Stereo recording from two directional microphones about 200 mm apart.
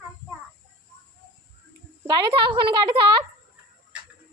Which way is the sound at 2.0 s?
20° right (ahead or behind).